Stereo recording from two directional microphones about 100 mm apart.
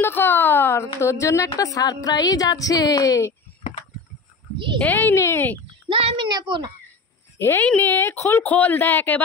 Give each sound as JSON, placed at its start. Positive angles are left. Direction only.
{"t": 0.0, "sound": "a woman's voice", "side_deg": 20}
{"t": 4.7, "sound": "speech", "side_deg": 20}
{"t": 5.9, "sound": "a woman's voice", "side_deg": -65}
{"t": 6.2, "sound": "speech", "side_deg": -50}
{"t": 7.3, "sound": "speech", "side_deg": 20}